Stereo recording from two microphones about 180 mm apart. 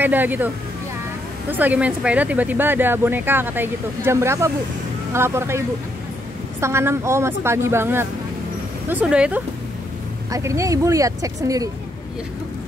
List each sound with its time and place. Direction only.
0.0 s speech: 10° right (ahead or behind)
1.5 s speech: 10° right (ahead or behind)
6.6 s speech: 15° right (ahead or behind)
10.3 s speech: 15° right (ahead or behind)